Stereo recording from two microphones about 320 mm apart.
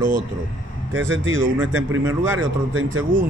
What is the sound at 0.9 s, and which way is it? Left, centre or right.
Speech, right.